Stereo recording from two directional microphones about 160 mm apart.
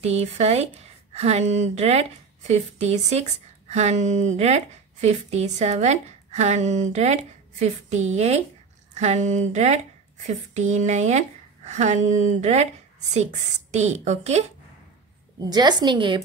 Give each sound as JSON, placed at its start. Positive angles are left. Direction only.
{"t": 0.0, "sound": "a woman's voice", "side_deg": -40}
{"t": 15.5, "sound": "a woman's voice", "side_deg": -25}